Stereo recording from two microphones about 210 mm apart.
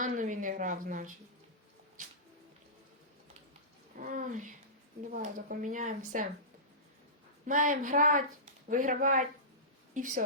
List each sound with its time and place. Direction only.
0.0 s a sound: 40° right (ahead or behind)
4.0 s speech: 35° right (ahead or behind)
7.4 s speech: 40° right (ahead or behind)